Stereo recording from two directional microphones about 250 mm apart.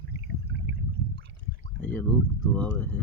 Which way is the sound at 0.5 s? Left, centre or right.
Right.